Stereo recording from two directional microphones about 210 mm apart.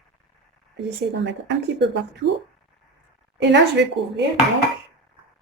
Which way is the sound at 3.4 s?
55° right (ahead or behind).